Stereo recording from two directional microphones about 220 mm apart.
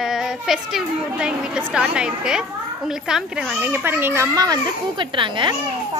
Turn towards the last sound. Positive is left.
turn(degrees=-20)  # may be behind; listen again after turning